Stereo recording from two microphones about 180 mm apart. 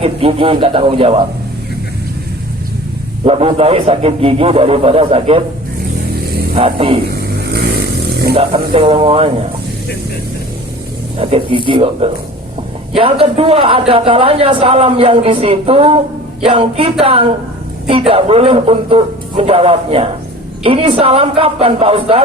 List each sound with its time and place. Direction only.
0.0 s speech: 30° right (ahead or behind)
3.2 s speech: 35° right (ahead or behind)
6.6 s speech: 30° right (ahead or behind)
8.4 s speech: 30° right (ahead or behind)
11.2 s speech: 30° right (ahead or behind)